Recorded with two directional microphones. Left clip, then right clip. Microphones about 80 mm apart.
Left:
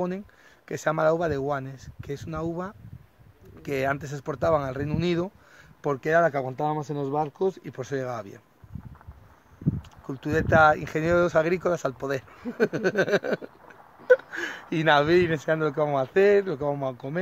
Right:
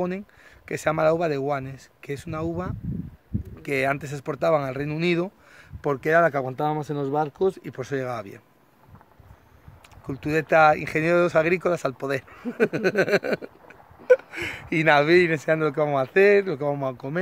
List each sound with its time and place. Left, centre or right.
0.7 s speech: centre; by 7.7 s right
7.7 s speech: centre
9.8 s speech: centre